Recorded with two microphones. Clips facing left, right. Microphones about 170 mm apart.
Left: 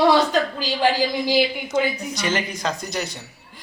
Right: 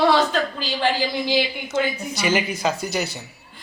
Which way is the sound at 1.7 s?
5° right (ahead or behind).